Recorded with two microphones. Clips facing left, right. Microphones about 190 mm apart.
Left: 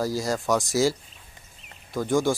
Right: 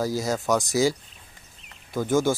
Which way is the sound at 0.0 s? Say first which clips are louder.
Even; centre (ahead or behind).